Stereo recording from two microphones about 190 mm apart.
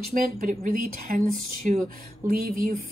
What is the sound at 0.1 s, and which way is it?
Speech, 45° right (ahead or behind).